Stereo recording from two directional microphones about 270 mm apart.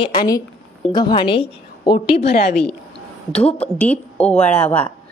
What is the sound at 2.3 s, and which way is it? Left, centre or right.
Speech, left.